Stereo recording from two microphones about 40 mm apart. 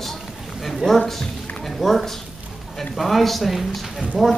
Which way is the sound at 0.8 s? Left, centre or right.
Centre.